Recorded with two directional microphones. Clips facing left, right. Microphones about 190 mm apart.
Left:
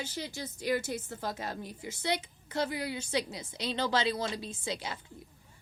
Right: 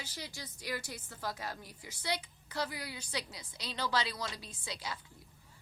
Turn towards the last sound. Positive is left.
turn(degrees=25)  # may be behind; listen again after turning